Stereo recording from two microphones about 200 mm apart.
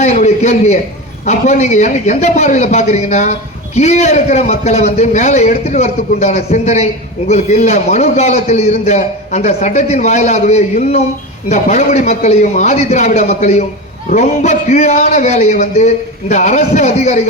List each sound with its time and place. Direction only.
0.0 s a man's voice: 35° left (ahead or behind)